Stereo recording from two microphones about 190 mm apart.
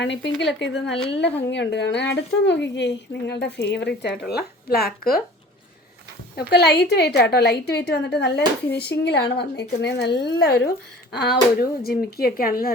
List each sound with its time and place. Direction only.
0.0 s speech: 70° left (ahead or behind); by 5.2 s 50° left (ahead or behind)
6.3 s speech: 55° left (ahead or behind)